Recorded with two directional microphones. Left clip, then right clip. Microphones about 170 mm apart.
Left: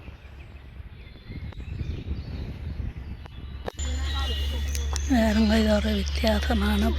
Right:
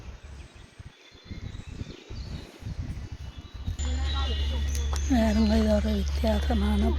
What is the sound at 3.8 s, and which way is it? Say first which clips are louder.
Music: right 1 dB; 55° right (ahead or behind).